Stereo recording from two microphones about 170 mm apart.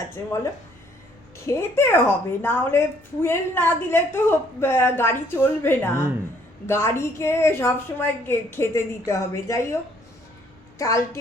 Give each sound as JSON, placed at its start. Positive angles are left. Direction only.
{"t": 1.5, "sound": "a woman's voice", "side_deg": 15}
{"t": 10.8, "sound": "a woman's voice", "side_deg": 20}